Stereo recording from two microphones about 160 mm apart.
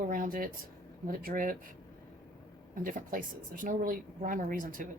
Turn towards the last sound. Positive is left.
turn(degrees=-55)  # may be behind; listen again after turning